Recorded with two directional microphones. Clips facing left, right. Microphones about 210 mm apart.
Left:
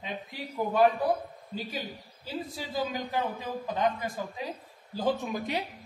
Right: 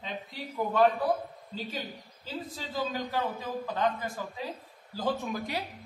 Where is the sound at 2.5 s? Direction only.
15° left (ahead or behind).